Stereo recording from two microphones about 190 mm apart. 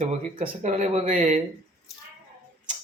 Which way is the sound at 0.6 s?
35° right (ahead or behind).